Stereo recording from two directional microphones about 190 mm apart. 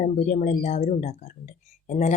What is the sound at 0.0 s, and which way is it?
Speech, 35° left (ahead or behind).